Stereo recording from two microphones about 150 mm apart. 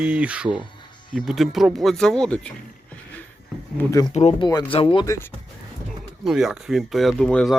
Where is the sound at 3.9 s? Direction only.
25° left (ahead or behind).